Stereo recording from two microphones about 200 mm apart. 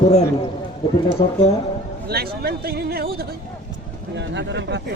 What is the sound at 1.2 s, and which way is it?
Speech, 25° left (ahead or behind).